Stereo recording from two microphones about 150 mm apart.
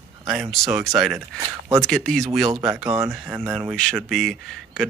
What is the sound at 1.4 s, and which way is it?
Speech, 20° right (ahead or behind).